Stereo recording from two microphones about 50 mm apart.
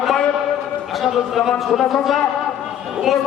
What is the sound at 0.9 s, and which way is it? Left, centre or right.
A man's voice, centre.